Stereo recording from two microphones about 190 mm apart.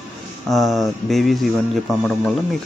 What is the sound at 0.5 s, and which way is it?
Speech, centre (ahead or behind).